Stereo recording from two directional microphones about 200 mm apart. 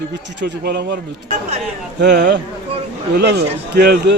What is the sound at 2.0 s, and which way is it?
A man's voice, 60° right (ahead or behind).